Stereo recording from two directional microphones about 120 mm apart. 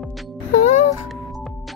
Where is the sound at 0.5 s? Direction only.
90° left.